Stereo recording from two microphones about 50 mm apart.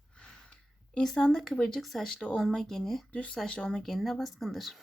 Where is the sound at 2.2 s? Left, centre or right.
Centre.